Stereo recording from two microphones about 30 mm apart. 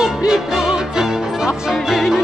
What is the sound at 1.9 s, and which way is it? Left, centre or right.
Music, centre.